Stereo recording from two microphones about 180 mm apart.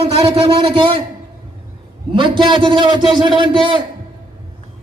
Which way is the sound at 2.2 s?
25° right (ahead or behind).